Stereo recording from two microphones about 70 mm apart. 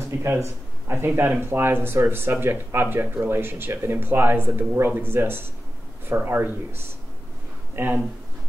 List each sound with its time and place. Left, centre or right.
0.2 s speech: right